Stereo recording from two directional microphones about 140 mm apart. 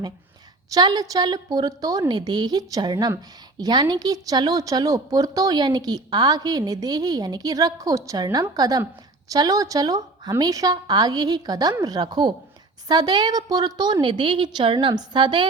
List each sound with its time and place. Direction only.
0.7 s a woman's voice: 30° right (ahead or behind)